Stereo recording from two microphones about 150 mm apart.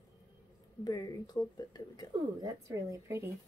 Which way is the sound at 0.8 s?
25° left (ahead or behind).